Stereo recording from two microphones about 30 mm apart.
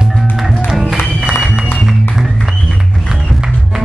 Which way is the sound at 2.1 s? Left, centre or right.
Centre.